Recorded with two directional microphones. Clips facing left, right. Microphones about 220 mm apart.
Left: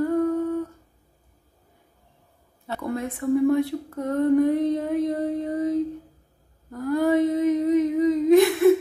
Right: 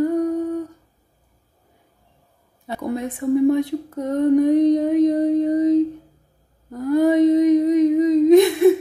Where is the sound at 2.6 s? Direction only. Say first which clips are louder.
Right 3 dB; 15° right (ahead or behind).